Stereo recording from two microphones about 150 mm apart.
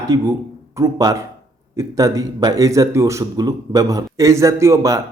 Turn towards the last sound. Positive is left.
turn(degrees=-20)  # may be behind; listen again after turning